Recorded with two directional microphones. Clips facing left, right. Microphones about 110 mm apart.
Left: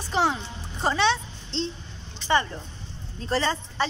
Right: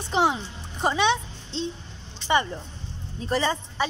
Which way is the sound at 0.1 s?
15° right (ahead or behind).